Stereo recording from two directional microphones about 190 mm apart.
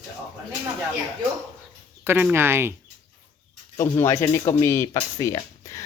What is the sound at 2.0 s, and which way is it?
Speech, 10° right (ahead or behind).